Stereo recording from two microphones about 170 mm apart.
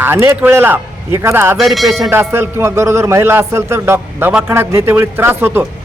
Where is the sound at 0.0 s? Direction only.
15° right (ahead or behind).